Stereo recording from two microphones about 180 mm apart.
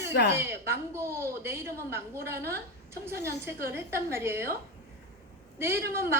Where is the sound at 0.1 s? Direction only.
65° left (ahead or behind).